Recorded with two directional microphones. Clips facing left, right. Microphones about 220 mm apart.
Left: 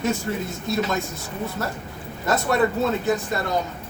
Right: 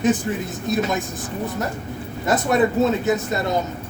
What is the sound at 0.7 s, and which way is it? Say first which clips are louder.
Speech: right 2 dB; 15° right (ahead or behind).